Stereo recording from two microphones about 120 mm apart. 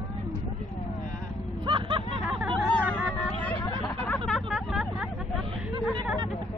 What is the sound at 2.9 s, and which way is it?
Hubbub, 15° left (ahead or behind).